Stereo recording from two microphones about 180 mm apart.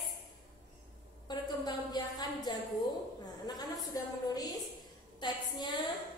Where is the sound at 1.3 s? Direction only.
25° left (ahead or behind).